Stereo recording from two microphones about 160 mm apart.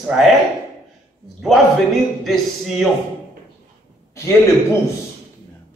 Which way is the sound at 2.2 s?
Centre (ahead or behind).